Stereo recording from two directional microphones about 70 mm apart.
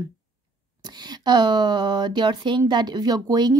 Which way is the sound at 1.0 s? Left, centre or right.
Right.